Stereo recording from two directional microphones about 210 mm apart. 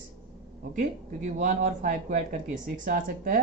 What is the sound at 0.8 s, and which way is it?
Speech, 40° right (ahead or behind).